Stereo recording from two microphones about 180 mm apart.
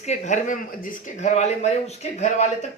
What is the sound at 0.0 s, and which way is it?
Speech, 40° left (ahead or behind).